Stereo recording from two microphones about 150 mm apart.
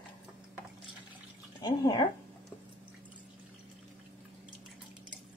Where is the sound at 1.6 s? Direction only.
25° left (ahead or behind).